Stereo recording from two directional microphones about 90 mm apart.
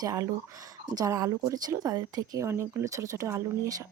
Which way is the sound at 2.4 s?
30° right (ahead or behind).